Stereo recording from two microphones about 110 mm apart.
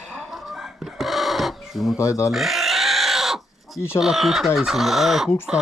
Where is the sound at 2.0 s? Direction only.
30° left (ahead or behind).